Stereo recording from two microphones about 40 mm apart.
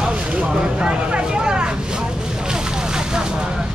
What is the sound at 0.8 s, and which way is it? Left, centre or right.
Speech, right.